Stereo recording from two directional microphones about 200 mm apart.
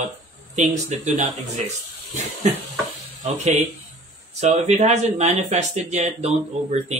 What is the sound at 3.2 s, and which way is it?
Speech, 35° right (ahead or behind).